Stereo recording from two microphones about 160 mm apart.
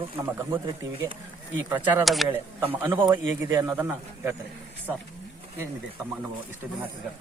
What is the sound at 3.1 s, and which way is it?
Speech, 25° right (ahead or behind).